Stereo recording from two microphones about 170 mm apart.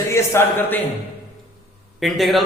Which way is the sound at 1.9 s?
Centre (ahead or behind).